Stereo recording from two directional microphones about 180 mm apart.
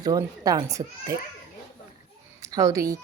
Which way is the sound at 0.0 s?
20° right (ahead or behind).